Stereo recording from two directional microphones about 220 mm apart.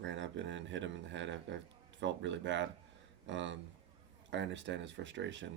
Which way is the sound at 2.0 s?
55° right (ahead or behind).